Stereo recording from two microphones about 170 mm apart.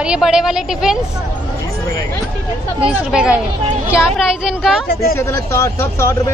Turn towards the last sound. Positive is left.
turn(degrees=15)  # may be behind; listen again after turning